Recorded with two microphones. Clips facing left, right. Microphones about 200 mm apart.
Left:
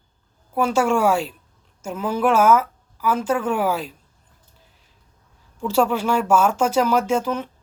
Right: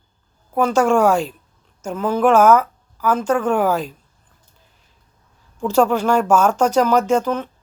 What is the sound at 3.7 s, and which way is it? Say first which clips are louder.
Speech: right 4 dB; 45° right (ahead or behind).